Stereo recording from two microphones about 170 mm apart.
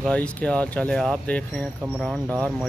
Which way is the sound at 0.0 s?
5° left (ahead or behind).